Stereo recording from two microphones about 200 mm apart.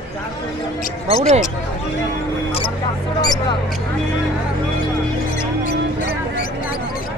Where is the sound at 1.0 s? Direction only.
35° right (ahead or behind).